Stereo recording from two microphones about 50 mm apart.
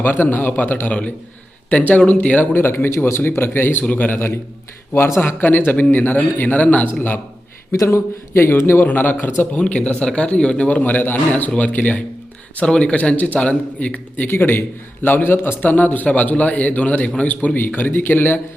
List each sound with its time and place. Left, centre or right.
0.0 s a man's voice: left
2.0 s a man's voice: left
2.6 s a man's voice: left
4.9 s speech: left
5.4 s a man's voice: left
7.9 s a man's voice: left
8.8 s a man's voice: left
9.5 s a man's voice: left
10.7 s a man's voice: left
12.5 s a man's voice: left
14.3 s a man's voice: left